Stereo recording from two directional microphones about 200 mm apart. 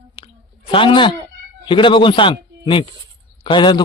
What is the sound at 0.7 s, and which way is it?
A man's voice, 25° left (ahead or behind).